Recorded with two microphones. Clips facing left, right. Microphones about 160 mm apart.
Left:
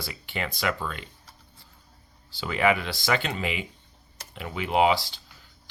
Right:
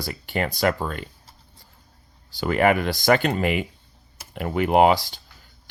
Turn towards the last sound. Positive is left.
turn(degrees=-45)  # may be behind; listen again after turning